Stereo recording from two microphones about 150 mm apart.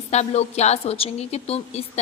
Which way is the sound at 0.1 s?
45° left (ahead or behind).